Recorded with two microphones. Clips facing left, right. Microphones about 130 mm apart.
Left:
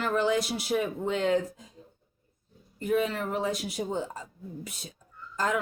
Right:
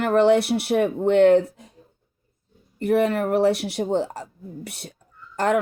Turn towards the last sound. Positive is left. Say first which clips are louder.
# right 8 dB
turn(degrees=-65)  # may be behind; listen again after turning